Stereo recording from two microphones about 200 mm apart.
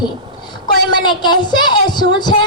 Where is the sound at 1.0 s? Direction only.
20° left (ahead or behind).